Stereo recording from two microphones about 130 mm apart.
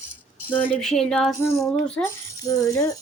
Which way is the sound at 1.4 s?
20° left (ahead or behind).